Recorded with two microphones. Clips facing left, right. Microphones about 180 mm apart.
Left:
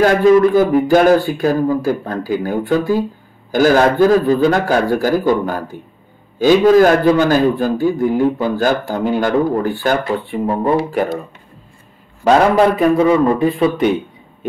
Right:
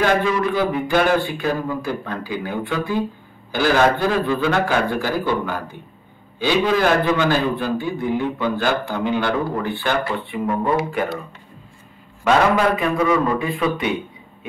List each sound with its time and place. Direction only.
0.0 s a man's voice: 40° left (ahead or behind)
12.3 s a man's voice: 35° left (ahead or behind)